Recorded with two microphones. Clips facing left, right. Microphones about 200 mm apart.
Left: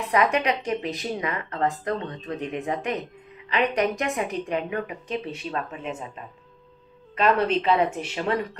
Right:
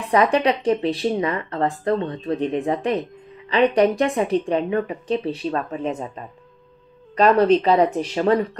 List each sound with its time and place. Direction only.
0.0 s speech: 30° right (ahead or behind)
7.2 s speech: 35° right (ahead or behind)